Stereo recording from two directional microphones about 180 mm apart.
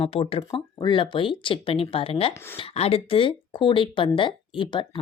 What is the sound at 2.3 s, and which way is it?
Speech, 15° left (ahead or behind).